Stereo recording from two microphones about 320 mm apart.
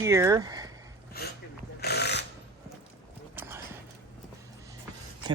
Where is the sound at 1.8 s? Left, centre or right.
Left.